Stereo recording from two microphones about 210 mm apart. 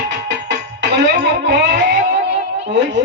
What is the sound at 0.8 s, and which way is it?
Music, 55° right (ahead or behind).